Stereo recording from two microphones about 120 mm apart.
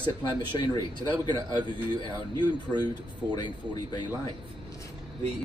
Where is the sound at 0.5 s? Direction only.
35° left (ahead or behind).